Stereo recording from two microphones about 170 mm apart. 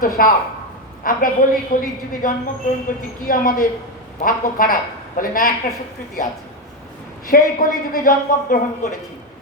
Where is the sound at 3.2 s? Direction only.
55° left (ahead or behind).